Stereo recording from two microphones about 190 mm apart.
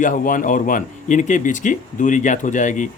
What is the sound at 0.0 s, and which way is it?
Speech, 45° left (ahead or behind).